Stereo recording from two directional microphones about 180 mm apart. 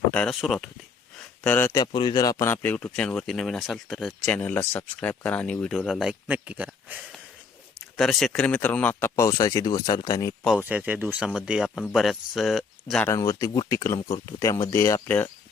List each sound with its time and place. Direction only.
0.1 s a man's voice: 5° left (ahead or behind); by 10.3 s 20° left (ahead or behind)
10.7 s speech: 10° right (ahead or behind)
13.1 s a man's voice: 20° left (ahead or behind)